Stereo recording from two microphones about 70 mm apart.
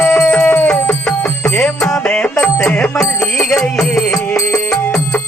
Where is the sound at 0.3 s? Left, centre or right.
Left.